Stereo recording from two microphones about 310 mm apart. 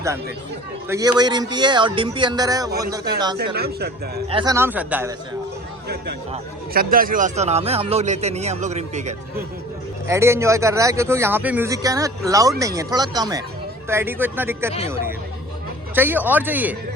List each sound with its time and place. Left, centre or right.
0.9 s speech: centre
3.3 s a man's voice: right
4.3 s speech: centre
6.3 s a man's voice: right
10.1 s speech: centre
16.0 s speech: centre